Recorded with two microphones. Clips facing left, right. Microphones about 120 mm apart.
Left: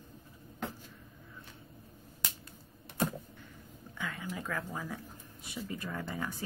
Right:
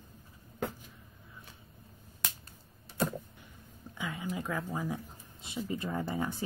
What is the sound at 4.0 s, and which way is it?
Speech, 15° right (ahead or behind).